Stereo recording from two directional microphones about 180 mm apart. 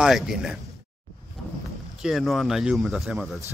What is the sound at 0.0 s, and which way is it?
Speech, 5° right (ahead or behind).